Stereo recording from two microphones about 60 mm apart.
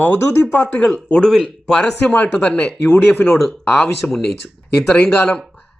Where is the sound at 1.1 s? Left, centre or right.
Centre.